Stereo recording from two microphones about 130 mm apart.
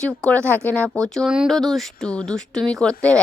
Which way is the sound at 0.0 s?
5° left (ahead or behind).